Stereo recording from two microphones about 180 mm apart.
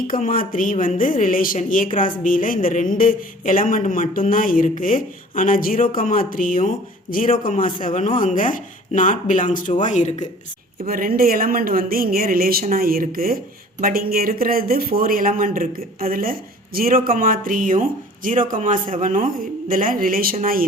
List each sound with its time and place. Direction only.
0.1 s speech: 50° left (ahead or behind)
10.8 s a man's voice: 50° right (ahead or behind)